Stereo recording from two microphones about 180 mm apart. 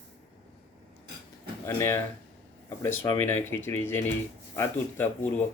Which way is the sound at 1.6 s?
15° left (ahead or behind).